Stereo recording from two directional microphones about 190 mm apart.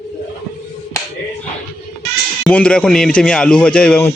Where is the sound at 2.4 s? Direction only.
5° left (ahead or behind).